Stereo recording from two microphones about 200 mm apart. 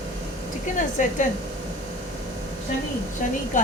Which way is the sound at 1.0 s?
40° left (ahead or behind).